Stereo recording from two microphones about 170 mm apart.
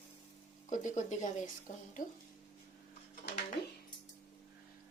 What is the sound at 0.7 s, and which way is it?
Speech, 45° left (ahead or behind).